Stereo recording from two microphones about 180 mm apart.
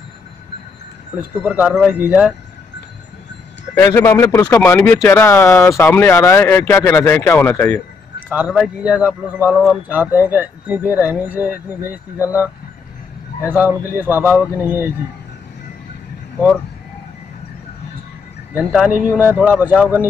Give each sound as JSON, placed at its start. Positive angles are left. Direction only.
{"t": 1.4, "sound": "speech", "side_deg": -10}
{"t": 3.7, "sound": "speech", "side_deg": 20}
{"t": 8.3, "sound": "speech", "side_deg": -5}
{"t": 13.5, "sound": "speech", "side_deg": -10}
{"t": 18.5, "sound": "speech", "side_deg": -10}